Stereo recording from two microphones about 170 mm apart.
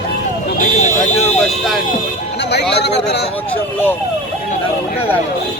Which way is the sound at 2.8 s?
80° left.